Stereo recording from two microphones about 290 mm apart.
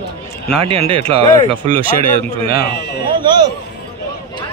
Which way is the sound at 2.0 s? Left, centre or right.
Right.